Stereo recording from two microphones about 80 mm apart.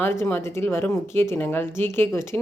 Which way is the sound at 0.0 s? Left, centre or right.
Left.